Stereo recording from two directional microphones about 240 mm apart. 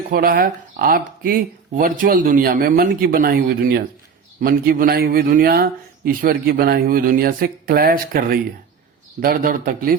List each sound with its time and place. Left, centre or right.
0.1 s speech: right